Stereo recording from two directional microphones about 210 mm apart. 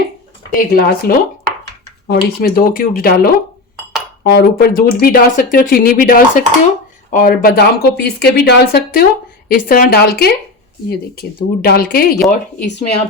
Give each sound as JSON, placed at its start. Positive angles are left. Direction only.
{"t": 0.5, "sound": "speech", "side_deg": 45}